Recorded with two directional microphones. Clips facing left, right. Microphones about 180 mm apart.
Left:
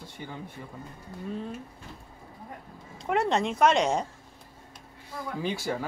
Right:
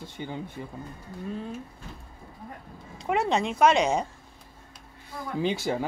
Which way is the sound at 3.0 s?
Centre (ahead or behind).